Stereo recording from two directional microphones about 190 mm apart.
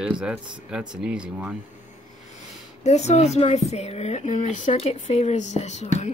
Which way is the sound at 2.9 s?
35° left (ahead or behind).